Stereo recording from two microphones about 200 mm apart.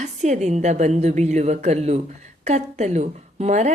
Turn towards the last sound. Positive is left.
turn(degrees=-35)  # may be behind; listen again after turning